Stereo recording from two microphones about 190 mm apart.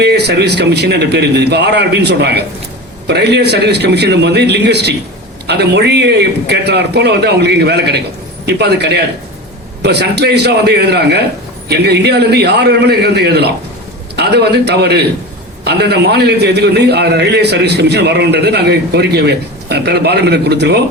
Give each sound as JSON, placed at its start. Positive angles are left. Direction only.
{"t": 0.0, "sound": "a man's voice", "side_deg": -60}